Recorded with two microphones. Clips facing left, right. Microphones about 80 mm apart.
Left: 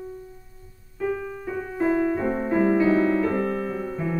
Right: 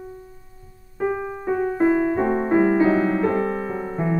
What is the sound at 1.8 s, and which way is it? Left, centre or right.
Music, right.